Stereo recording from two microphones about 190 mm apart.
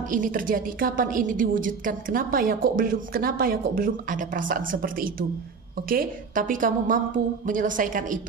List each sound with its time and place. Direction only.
0.1 s a woman's voice: 45° right (ahead or behind)